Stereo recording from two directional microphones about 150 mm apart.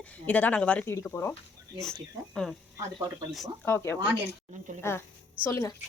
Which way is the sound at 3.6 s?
15° left (ahead or behind).